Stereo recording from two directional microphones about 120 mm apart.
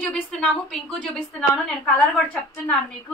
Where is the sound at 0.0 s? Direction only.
10° left (ahead or behind).